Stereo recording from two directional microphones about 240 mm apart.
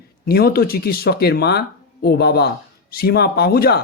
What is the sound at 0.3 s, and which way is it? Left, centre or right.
Speech, left.